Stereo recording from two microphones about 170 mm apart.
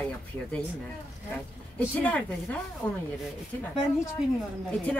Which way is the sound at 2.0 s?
10° left (ahead or behind).